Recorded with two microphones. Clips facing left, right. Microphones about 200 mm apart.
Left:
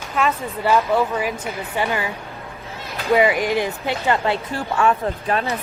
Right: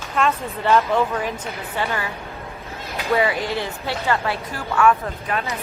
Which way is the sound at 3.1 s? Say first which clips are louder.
Left 4 dB; 15° left (ahead or behind).